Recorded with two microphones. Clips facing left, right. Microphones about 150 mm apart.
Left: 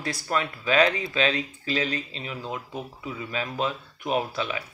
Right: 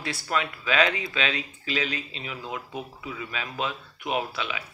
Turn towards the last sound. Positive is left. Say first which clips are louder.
# left 2 dB
turn(degrees=35)  # may be behind; listen again after turning